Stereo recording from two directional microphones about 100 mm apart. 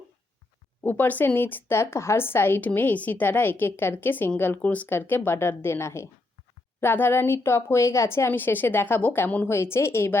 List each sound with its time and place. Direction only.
0.8 s a woman's voice: 20° left (ahead or behind)